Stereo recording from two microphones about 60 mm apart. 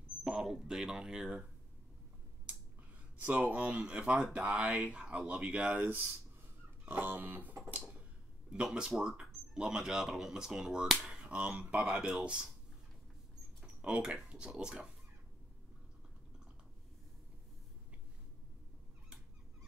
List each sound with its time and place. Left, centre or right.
0.2 s speech: centre
3.2 s speech: right
5.8 s speech: right
6.9 s music: right
8.7 s speech: centre
13.7 s speech: centre